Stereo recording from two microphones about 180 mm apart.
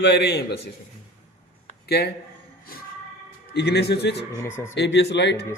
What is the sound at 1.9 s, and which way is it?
Speech, 65° left (ahead or behind).